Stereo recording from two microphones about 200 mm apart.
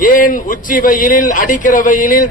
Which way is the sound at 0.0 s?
45° left (ahead or behind).